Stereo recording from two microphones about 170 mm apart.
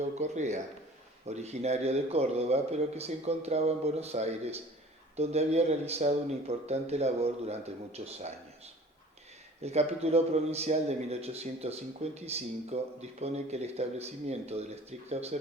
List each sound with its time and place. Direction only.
0.0 s a man's voice: 45° right (ahead or behind)